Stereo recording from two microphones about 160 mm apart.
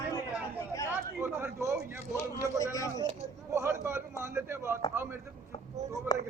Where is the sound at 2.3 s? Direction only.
20° left (ahead or behind).